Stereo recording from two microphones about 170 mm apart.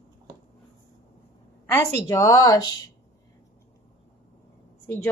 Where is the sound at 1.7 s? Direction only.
20° left (ahead or behind).